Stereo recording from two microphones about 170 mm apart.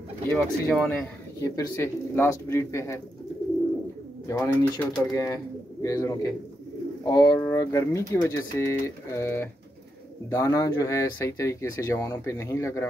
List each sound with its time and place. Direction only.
0.3 s speech: 10° left (ahead or behind)
4.3 s speech: 10° left (ahead or behind)